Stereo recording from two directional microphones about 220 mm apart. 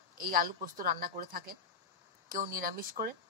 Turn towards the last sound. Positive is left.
turn(degrees=-40)  # may be behind; listen again after turning